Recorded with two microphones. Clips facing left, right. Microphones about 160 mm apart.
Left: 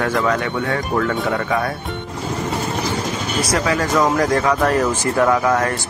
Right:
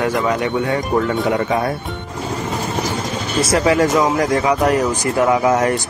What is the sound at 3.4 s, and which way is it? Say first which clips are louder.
Speech: right 6 dB; 25° right (ahead or behind).